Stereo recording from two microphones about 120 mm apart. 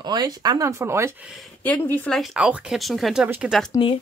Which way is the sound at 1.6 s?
10° left (ahead or behind).